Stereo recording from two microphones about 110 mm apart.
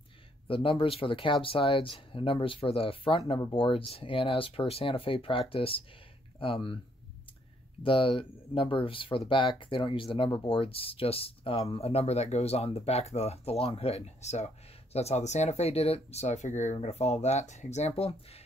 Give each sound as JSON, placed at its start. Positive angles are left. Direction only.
{"t": 0.5, "sound": "speech", "side_deg": 50}
{"t": 7.8, "sound": "speech", "side_deg": 55}